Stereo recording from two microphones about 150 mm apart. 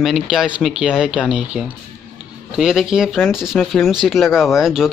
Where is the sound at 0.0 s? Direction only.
Centre (ahead or behind).